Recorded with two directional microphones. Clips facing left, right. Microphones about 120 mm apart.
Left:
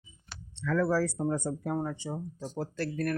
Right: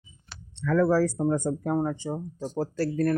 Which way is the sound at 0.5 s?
45° right (ahead or behind).